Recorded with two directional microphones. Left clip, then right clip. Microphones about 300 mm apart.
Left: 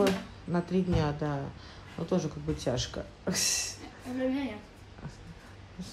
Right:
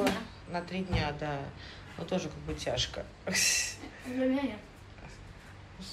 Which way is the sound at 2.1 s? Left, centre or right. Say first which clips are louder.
Left 3 dB; centre.